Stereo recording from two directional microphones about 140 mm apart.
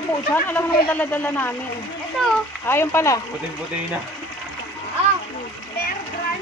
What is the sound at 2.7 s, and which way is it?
Speech, 15° left (ahead or behind).